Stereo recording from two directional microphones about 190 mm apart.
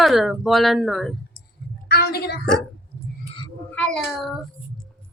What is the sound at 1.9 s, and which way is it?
Speech, 55° left (ahead or behind).